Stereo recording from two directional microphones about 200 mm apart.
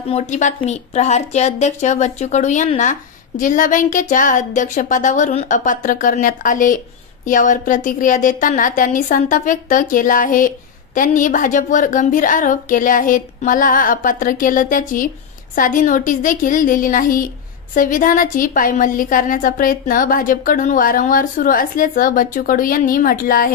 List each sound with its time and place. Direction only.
0.1 s a woman's voice: 35° left (ahead or behind)